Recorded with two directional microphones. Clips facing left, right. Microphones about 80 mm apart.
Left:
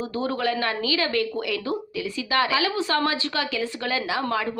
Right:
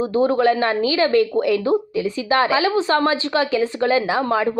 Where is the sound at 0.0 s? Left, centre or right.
Right.